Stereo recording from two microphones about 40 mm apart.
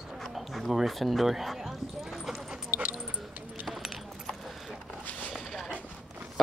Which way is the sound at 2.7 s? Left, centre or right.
Right.